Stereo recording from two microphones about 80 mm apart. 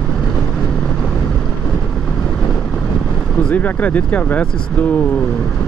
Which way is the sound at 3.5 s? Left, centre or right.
Centre.